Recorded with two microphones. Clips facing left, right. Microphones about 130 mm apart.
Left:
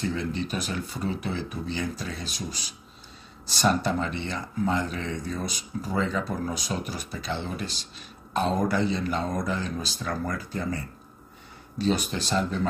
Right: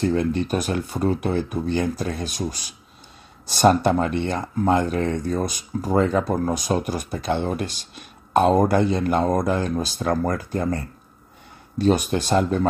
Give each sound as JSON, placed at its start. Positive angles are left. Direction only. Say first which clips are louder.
{"t": 0.0, "sound": "speech", "louder": "right 8 dB", "side_deg": -55}
{"t": 11.8, "sound": "speech", "louder": "right 7 dB", "side_deg": -50}